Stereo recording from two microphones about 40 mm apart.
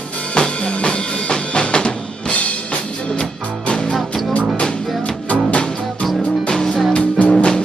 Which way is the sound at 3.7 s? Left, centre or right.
Left.